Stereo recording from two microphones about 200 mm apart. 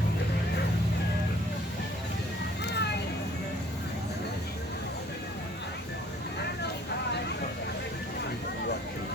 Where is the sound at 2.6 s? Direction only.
55° left (ahead or behind).